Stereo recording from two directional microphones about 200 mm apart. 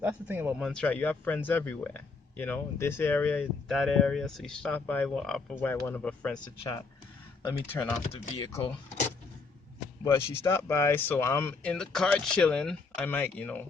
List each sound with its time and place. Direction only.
0.0 s speech: 10° right (ahead or behind)
0.6 s speech: 5° left (ahead or behind)
6.6 s speech: 25° left (ahead or behind)
7.4 s speech: 10° left (ahead or behind)
8.0 s speech: 30° left (ahead or behind)
10.0 s speech: 15° left (ahead or behind)